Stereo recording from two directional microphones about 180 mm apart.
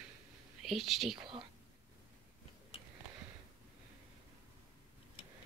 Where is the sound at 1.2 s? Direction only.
25° right (ahead or behind).